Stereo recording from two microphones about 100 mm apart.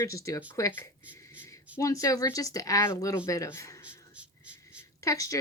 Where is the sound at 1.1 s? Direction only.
20° left (ahead or behind).